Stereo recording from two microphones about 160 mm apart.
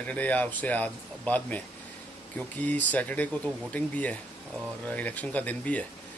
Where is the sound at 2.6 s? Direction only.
10° left (ahead or behind).